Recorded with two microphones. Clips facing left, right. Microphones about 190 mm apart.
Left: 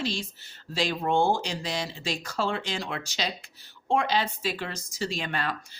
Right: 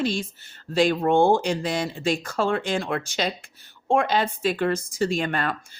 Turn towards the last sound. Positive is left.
turn(degrees=-50)  # may be behind; listen again after turning